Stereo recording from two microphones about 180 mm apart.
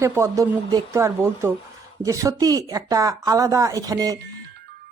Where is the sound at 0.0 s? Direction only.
15° right (ahead or behind).